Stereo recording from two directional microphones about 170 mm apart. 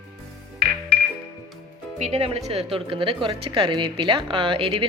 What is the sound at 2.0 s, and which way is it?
A woman's voice, 35° right (ahead or behind).